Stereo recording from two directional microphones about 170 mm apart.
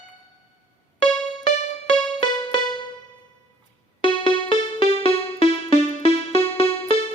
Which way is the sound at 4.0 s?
30° left (ahead or behind).